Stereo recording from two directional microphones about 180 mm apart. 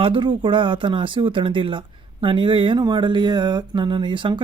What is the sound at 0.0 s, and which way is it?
Speech, 30° right (ahead or behind).